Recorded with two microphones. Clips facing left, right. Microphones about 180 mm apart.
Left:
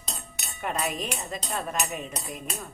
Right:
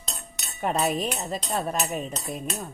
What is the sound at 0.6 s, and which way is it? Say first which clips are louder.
Speech: right 5 dB; 35° right (ahead or behind).